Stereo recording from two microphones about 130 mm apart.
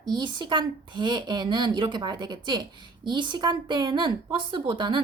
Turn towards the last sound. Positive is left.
turn(degrees=-35)  # may be behind; listen again after turning